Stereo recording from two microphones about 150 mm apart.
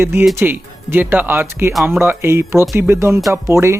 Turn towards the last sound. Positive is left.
turn(degrees=-20)  # may be behind; listen again after turning